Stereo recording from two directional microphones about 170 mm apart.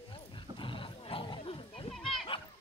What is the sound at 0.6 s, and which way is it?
Roaring cats, 30° left (ahead or behind).